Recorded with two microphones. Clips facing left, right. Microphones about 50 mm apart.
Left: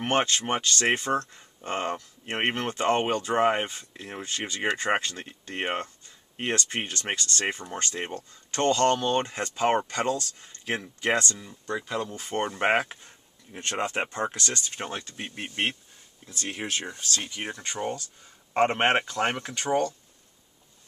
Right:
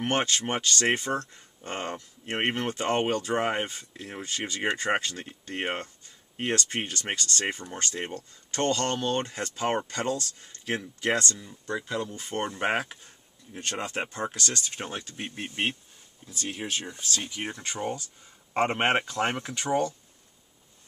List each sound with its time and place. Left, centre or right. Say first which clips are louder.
0.0 s speech: left 2 dB; centre
14.8 s speech: left 1 dB; centre
15.3 s speech: left 1 dB; left
17.4 s speech: left 1 dB; centre